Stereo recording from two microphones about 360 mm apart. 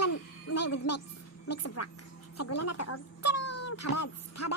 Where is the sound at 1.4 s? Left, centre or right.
Left.